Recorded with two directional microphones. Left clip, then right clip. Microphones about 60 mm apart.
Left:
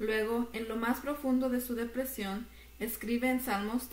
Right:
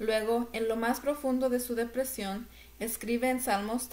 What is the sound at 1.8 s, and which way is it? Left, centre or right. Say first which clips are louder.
A woman's voice: right 4 dB; right.